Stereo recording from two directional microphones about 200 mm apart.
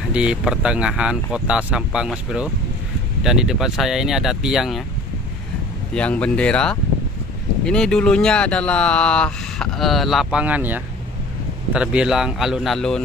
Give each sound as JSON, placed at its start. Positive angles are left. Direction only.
{"t": 0.1, "sound": "speech", "side_deg": -5}
{"t": 5.9, "sound": "speech", "side_deg": 5}